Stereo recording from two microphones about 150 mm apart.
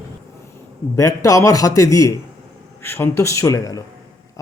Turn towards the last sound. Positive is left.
turn(degrees=20)  # may be behind; listen again after turning